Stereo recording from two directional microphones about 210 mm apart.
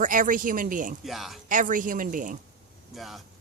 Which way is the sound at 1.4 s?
40° right (ahead or behind).